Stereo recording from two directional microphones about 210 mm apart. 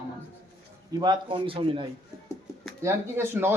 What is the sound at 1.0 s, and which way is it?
Speech, 20° right (ahead or behind).